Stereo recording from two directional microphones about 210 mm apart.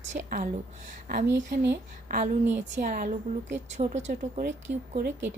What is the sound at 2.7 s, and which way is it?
A woman's voice, 40° right (ahead or behind).